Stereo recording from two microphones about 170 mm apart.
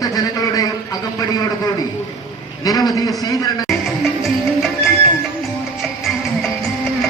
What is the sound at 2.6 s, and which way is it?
Speech, 20° left (ahead or behind).